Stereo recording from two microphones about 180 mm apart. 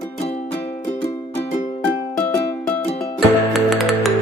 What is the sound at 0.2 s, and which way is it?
Music, 35° left (ahead or behind).